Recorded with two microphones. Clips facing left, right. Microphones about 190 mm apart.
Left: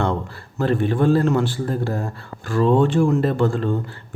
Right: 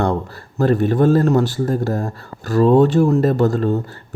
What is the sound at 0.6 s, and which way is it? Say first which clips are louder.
A man's voice: right 4 dB; 40° right (ahead or behind).